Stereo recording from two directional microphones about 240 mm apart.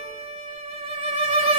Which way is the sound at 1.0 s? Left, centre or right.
Right.